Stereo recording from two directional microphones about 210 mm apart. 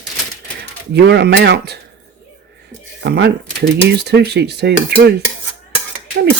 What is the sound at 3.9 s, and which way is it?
Dishes, 50° right (ahead or behind).